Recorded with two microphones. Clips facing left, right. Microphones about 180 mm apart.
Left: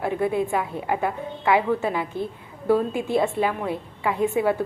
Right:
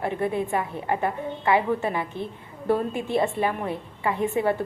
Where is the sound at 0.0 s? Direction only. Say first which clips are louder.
Left 2 dB; 10° left (ahead or behind).